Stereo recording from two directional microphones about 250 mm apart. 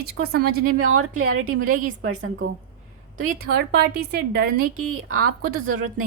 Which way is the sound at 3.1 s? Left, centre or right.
Right.